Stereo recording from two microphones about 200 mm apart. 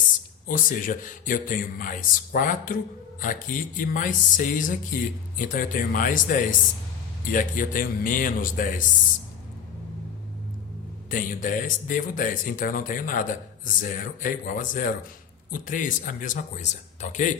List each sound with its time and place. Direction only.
0.4 s speech: 40° left (ahead or behind)
11.1 s speech: 40° left (ahead or behind)